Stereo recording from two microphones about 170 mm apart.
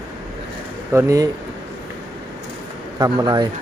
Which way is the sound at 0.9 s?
20° right (ahead or behind).